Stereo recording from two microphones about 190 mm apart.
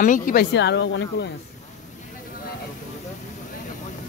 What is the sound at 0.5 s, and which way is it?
Speech, 65° left (ahead or behind).